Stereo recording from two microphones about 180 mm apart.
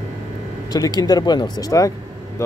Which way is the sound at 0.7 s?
20° left (ahead or behind).